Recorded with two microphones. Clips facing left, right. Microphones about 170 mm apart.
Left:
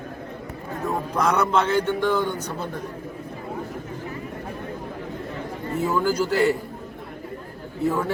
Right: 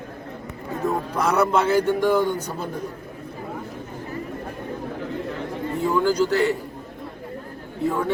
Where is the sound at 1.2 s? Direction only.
5° right (ahead or behind).